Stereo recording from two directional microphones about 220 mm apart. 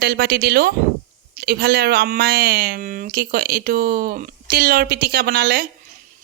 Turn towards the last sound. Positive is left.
turn(degrees=-45)  # may be behind; listen again after turning